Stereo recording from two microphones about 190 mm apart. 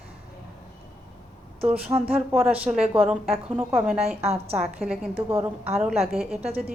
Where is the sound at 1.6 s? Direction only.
5° right (ahead or behind).